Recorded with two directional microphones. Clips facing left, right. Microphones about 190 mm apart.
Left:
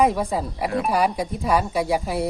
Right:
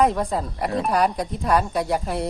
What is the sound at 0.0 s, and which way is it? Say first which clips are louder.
Speech: even; 5° left (ahead or behind).